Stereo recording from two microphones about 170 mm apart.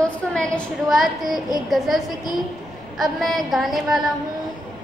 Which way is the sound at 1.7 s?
Centre (ahead or behind).